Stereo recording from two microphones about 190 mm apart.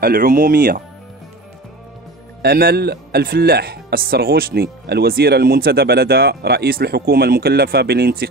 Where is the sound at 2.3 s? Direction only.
55° right (ahead or behind).